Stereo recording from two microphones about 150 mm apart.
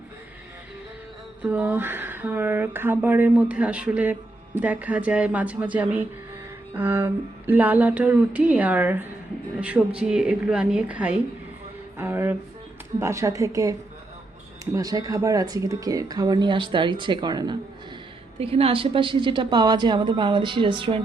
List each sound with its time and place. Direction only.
1.4 s speech: 10° right (ahead or behind); by 17.6 s 30° right (ahead or behind)
18.3 s a woman's voice: 40° right (ahead or behind)